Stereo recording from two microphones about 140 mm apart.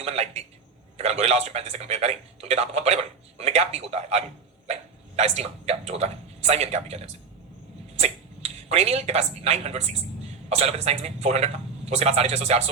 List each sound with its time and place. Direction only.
0.0 s a man's voice: 50° right (ahead or behind)